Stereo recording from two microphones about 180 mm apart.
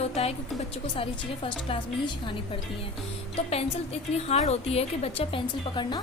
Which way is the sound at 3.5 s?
35° left (ahead or behind).